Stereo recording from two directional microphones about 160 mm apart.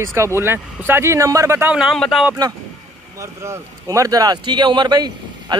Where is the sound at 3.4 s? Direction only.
20° right (ahead or behind).